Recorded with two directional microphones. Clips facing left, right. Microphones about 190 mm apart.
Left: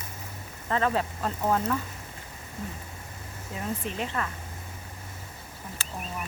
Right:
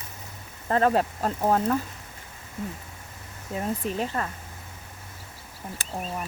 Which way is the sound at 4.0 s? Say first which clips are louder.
Right 3 dB; 40° right (ahead or behind).